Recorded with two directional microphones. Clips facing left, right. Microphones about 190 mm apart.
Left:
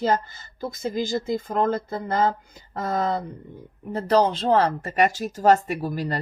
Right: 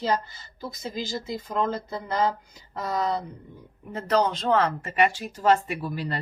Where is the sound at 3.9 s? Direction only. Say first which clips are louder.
Left 4 dB; 35° left (ahead or behind).